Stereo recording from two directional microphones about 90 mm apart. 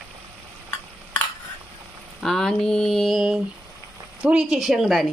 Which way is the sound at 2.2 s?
5° left (ahead or behind).